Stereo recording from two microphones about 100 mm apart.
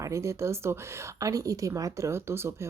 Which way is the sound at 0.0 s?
30° right (ahead or behind).